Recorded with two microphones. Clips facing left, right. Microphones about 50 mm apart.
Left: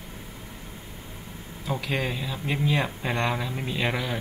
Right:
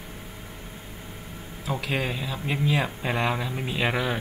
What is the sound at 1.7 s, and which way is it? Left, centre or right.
Speech, centre.